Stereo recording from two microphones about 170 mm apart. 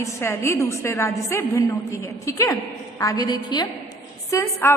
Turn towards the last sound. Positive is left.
turn(degrees=15)  # may be behind; listen again after turning